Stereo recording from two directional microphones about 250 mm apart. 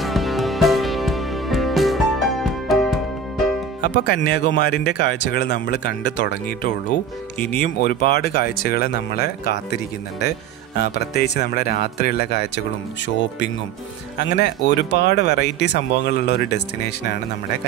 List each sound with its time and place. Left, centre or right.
0.0 s music: centre
3.8 s speech: left